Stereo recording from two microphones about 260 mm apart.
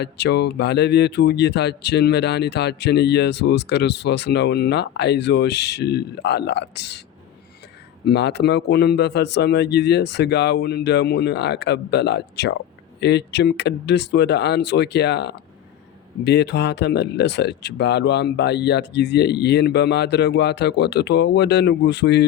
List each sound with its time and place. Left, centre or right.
0.0 s speech: left
8.0 s speech: left